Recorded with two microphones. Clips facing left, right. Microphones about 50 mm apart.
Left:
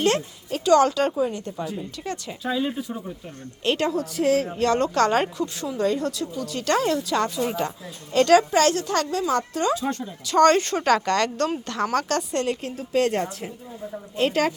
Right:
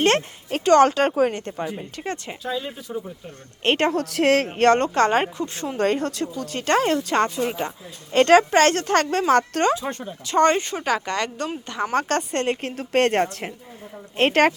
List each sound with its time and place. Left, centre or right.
0.0 s a woman's voice: right
1.1 s a woman's voice: right
1.5 s speech: right
2.4 s speech: centre
3.6 s a woman's voice: right
4.9 s speech: right
5.7 s speech: right
7.4 s a woman's voice: right
8.1 s a woman's voice: right
9.7 s a woman's voice: right
10.5 s speech: centre
11.9 s a woman's voice: right